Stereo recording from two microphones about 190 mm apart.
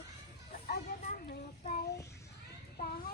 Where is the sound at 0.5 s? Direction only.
45° left (ahead or behind).